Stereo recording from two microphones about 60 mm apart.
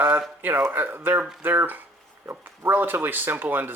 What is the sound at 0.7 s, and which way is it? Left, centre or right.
Speech, right.